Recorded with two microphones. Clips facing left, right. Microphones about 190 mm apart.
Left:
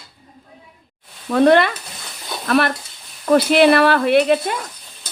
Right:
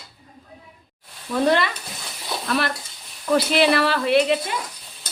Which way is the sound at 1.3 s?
60° left (ahead or behind).